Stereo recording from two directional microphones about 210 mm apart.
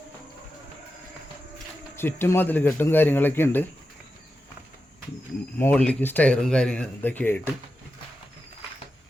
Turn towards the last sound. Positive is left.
turn(degrees=10)  # may be behind; listen again after turning